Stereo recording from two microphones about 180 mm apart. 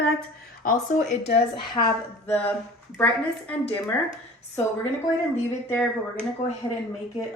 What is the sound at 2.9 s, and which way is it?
Speech, 10° left (ahead or behind).